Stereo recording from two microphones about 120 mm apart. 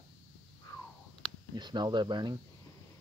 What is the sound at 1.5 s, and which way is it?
Speech, 40° right (ahead or behind).